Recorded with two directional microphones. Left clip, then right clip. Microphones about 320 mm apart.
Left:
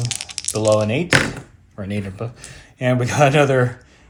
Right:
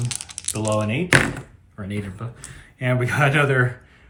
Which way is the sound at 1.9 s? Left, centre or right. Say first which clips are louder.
Left 4 dB; centre.